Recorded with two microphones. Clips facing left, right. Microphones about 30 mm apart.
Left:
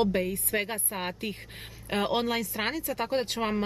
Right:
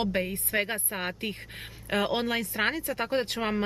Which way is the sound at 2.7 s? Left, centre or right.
Centre.